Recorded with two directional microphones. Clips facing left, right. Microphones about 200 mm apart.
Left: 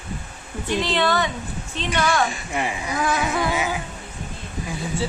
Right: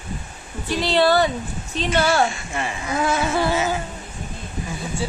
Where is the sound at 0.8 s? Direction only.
35° right (ahead or behind).